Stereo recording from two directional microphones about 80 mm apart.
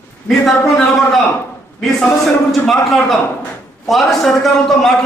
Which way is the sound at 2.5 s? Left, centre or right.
Centre.